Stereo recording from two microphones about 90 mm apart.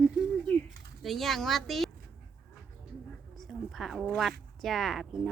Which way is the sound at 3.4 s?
Centre (ahead or behind).